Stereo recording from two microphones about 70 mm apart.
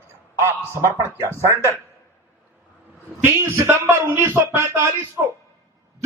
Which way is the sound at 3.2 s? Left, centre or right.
Right.